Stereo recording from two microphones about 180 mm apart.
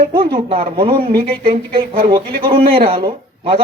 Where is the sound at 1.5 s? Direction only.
55° right (ahead or behind).